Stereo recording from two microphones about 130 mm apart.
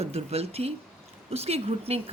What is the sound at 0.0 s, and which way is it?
A woman's voice, 50° right (ahead or behind).